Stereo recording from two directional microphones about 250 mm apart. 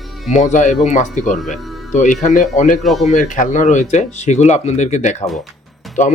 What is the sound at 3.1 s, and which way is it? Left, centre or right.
Speech, left.